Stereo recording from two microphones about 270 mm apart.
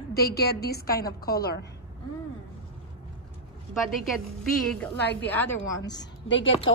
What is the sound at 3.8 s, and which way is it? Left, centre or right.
A woman's voice, centre.